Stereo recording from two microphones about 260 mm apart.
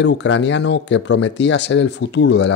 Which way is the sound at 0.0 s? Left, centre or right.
Left.